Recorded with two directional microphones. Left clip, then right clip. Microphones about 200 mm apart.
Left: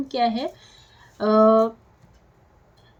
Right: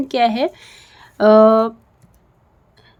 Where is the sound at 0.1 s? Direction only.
50° right (ahead or behind).